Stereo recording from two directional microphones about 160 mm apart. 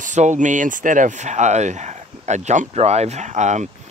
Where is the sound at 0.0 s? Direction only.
50° right (ahead or behind).